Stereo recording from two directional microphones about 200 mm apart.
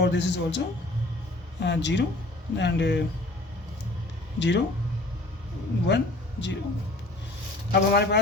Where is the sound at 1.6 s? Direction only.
60° left (ahead or behind).